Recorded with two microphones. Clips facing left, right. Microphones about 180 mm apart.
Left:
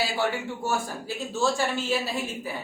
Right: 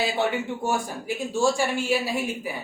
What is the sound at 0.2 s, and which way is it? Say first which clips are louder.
A woman's voice: right 2 dB; 15° right (ahead or behind).